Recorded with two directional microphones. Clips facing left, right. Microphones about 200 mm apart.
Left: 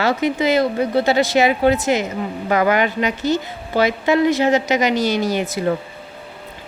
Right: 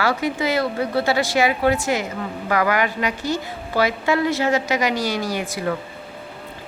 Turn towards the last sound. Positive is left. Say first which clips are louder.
# left 5 dB
turn(degrees=25)  # may be behind; listen again after turning